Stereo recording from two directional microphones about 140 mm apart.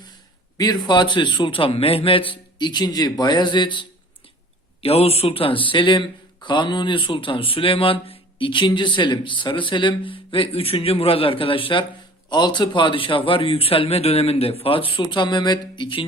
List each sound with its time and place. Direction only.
0.5 s a man's voice: 30° left (ahead or behind)
4.8 s a man's voice: 45° left (ahead or behind)